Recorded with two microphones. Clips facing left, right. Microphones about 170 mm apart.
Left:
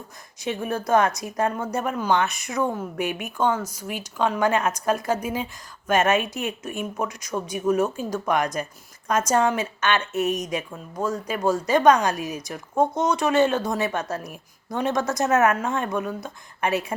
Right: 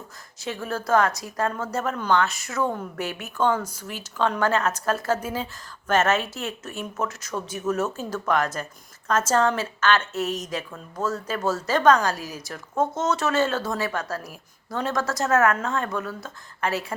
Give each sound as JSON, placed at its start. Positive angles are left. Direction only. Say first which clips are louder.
{"t": 0.4, "sound": "speech", "louder": "left 2 dB", "side_deg": 20}